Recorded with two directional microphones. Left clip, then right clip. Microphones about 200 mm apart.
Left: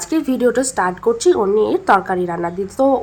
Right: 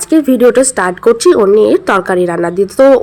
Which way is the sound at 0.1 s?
15° right (ahead or behind).